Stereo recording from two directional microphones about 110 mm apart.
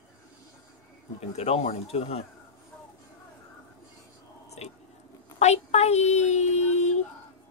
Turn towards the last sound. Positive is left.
turn(degrees=90)